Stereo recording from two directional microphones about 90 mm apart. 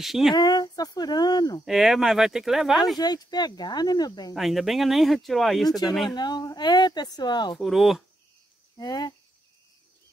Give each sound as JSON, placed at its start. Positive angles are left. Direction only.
{"t": 0.0, "sound": "speech", "side_deg": -5}
{"t": 0.3, "sound": "speech", "side_deg": 50}
{"t": 1.7, "sound": "speech", "side_deg": -5}
{"t": 3.0, "sound": "speech", "side_deg": 50}
{"t": 4.4, "sound": "speech", "side_deg": 0}
{"t": 6.1, "sound": "speech", "side_deg": 50}
{"t": 7.5, "sound": "speech", "side_deg": 0}
{"t": 8.7, "sound": "speech", "side_deg": 45}